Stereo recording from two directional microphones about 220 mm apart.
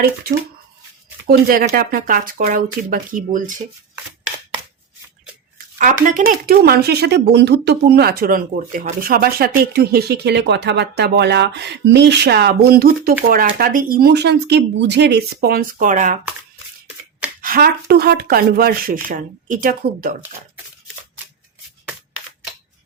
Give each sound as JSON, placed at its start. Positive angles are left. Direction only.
{"t": 1.3, "sound": "speech", "side_deg": -40}
{"t": 5.8, "sound": "speech", "side_deg": -35}
{"t": 17.4, "sound": "speech", "side_deg": -40}